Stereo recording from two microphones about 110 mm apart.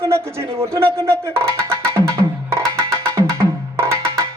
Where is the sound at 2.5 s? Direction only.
30° right (ahead or behind).